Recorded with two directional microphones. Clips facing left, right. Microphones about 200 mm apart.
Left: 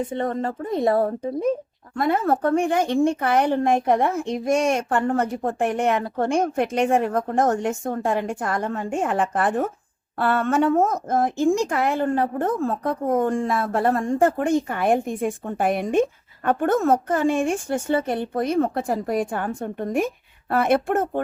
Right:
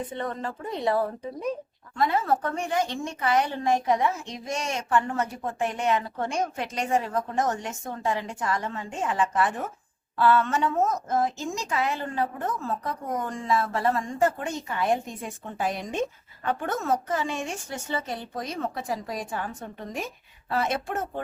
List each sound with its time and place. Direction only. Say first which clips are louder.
0.2 s a woman's voice: left 7 dB; 45° left (ahead or behind)